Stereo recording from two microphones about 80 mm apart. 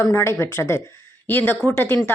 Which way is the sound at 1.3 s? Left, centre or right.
Left.